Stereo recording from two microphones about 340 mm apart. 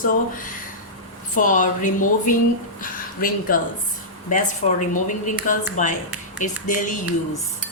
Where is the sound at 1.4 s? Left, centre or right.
Left.